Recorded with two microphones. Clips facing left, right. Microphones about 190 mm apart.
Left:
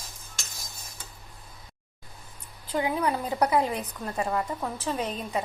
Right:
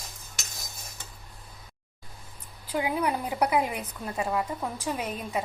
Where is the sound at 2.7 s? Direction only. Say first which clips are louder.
Left 1 dB; 10° right (ahead or behind).